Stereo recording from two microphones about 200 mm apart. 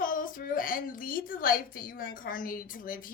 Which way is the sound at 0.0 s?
45° left (ahead or behind).